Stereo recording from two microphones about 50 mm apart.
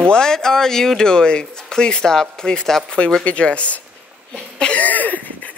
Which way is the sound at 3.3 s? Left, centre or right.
Left.